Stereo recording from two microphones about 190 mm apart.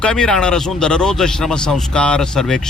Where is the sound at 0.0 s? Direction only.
5° left (ahead or behind).